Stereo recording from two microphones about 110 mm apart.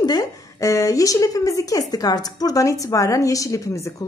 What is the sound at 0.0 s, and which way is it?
A woman's voice, 35° left (ahead or behind).